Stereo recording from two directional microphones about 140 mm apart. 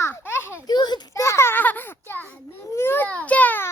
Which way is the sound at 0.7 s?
30° left (ahead or behind).